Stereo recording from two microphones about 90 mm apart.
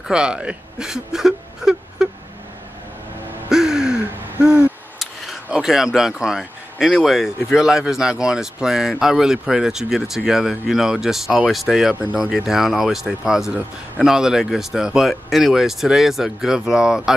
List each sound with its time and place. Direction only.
0.1 s whimper: 10° right (ahead or behind)
3.4 s gasp: 5° right (ahead or behind)
4.9 s speech: 5° right (ahead or behind)
11.9 s speech: 15° right (ahead or behind)
12.4 s speech: 5° right (ahead or behind)